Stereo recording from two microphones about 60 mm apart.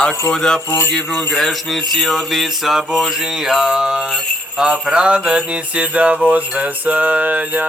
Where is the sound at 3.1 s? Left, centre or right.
Centre; by 7.6 s right.